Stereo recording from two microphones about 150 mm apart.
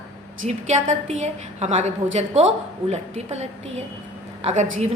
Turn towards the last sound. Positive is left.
turn(degrees=-45)  # may be behind; listen again after turning